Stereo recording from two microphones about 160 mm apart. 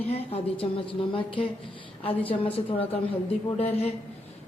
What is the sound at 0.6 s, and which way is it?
A woman's voice, 35° left (ahead or behind).